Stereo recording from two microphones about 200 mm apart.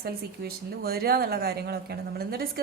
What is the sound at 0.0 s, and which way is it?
Speech, 50° right (ahead or behind).